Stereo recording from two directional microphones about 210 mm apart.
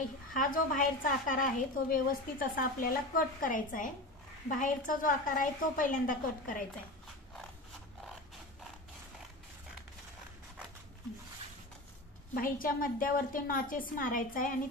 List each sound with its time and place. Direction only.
0.3 s a woman's voice: 40° left (ahead or behind)
12.4 s a woman's voice: 40° left (ahead or behind)